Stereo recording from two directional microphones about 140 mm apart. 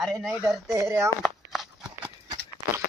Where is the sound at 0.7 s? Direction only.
20° right (ahead or behind).